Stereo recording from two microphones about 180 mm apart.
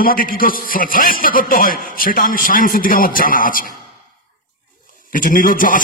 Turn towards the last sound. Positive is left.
turn(degrees=50)  # may be behind; listen again after turning